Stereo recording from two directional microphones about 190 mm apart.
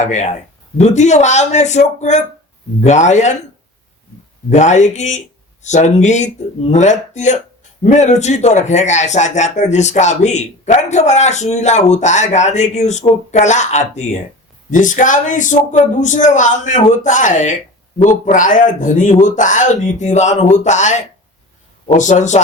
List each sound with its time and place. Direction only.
0.0 s speech: 40° left (ahead or behind)
4.4 s speech: 40° left (ahead or behind)